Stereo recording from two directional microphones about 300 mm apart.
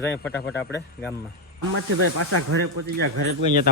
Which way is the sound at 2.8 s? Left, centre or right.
Right.